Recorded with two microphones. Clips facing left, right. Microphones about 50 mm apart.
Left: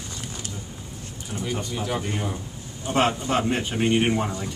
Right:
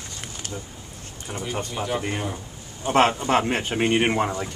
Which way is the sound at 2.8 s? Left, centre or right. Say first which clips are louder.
Right 3 dB; right.